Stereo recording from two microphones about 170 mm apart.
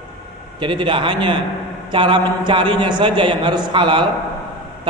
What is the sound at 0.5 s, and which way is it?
A man's voice, 30° right (ahead or behind).